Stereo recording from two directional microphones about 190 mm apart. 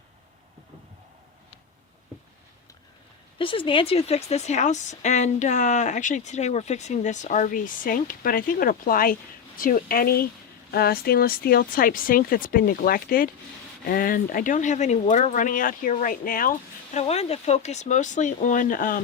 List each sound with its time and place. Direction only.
3.3 s speech: 25° left (ahead or behind); by 19.0 s 45° left (ahead or behind)